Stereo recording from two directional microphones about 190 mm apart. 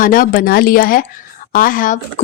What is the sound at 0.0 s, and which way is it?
A woman's voice, 50° left (ahead or behind).